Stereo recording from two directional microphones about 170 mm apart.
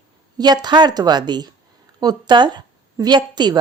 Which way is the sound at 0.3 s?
25° right (ahead or behind).